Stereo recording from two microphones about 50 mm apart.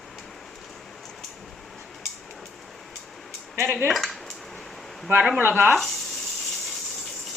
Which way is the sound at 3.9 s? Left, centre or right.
Centre.